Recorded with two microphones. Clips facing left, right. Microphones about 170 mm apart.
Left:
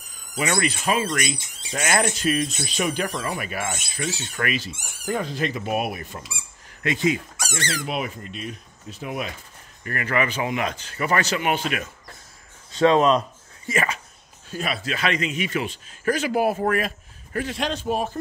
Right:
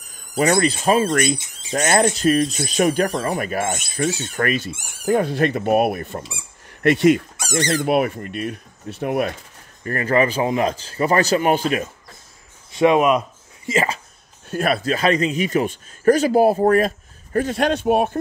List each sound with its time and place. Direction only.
0.4 s speech: 35° right (ahead or behind)
5.0 s speech: 60° right (ahead or behind)
6.8 s speech: 70° right (ahead or behind)
7.3 s speech: 15° right (ahead or behind)
7.8 s speech: 55° right (ahead or behind)
9.8 s speech: 35° right (ahead or behind)
12.7 s speech: 15° right (ahead or behind)
13.7 s speech: 25° right (ahead or behind)
14.5 s speech: 50° right (ahead or behind)
14.9 s speech: 40° right (ahead or behind); by 18.2 s 60° right (ahead or behind)